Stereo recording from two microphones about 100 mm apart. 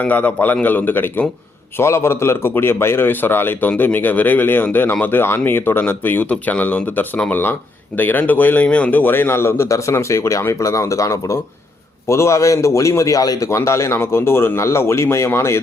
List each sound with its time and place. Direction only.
0.0 s a man's voice: 15° left (ahead or behind)